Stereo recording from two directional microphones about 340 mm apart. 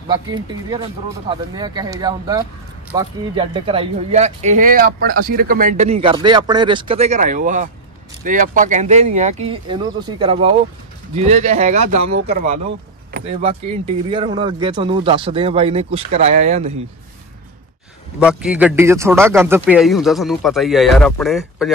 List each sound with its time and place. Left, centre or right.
0.1 s speech: centre
11.8 s speech: right
12.3 s speech: right
18.2 s speech: centre